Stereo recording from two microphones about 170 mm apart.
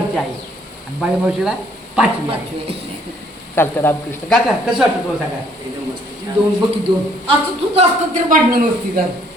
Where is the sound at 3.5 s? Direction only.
15° left (ahead or behind).